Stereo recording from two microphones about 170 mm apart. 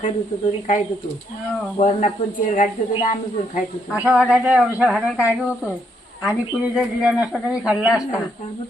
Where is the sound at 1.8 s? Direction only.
40° left (ahead or behind).